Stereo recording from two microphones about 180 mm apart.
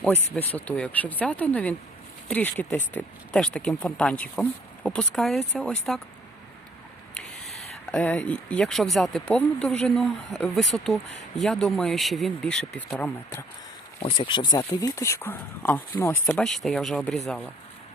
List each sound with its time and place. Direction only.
0.3 s speech: 10° left (ahead or behind)
7.2 s speech: 5° left (ahead or behind)
14.3 s speech: 25° left (ahead or behind); by 17.5 s 5° left (ahead or behind)